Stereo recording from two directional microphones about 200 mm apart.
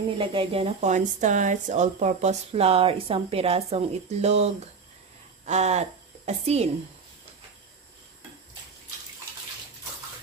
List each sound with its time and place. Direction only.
0.2 s speech: 25° right (ahead or behind)